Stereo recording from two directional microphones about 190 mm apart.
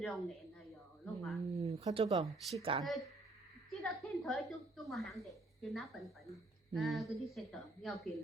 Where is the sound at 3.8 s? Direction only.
Centre (ahead or behind).